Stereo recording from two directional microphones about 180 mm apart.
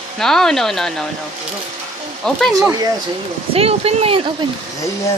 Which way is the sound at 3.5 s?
35° right (ahead or behind).